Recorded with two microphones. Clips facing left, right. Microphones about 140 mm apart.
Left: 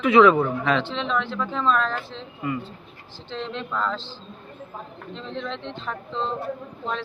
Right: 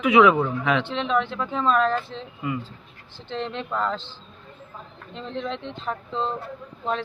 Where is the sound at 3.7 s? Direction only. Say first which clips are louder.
Right 1 dB; 30° right (ahead or behind).